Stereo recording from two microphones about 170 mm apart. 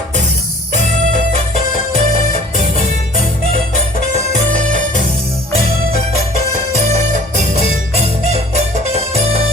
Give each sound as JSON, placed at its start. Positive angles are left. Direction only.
{"t": 2.0, "sound": "music", "side_deg": -45}
{"t": 4.4, "sound": "music", "side_deg": -50}
{"t": 6.7, "sound": "music", "side_deg": -40}
{"t": 8.9, "sound": "music", "side_deg": -40}